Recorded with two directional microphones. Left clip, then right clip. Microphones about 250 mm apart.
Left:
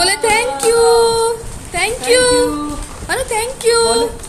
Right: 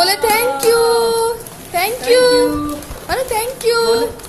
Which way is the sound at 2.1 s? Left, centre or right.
Centre.